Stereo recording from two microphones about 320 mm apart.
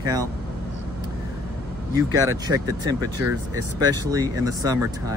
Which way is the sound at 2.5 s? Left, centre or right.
Centre.